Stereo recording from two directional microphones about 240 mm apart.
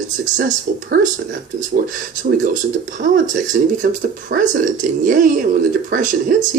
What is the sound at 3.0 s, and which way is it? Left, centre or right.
Speech, right.